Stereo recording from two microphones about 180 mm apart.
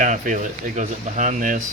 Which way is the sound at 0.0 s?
45° right (ahead or behind).